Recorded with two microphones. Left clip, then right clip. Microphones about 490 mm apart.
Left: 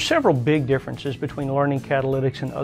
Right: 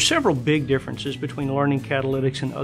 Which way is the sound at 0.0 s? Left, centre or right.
Left.